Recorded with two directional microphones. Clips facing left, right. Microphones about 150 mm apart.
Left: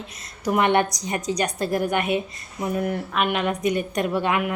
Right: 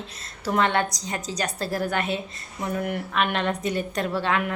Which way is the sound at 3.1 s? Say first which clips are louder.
Even; 5° left (ahead or behind).